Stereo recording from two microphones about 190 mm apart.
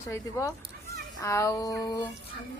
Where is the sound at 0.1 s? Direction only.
15° left (ahead or behind).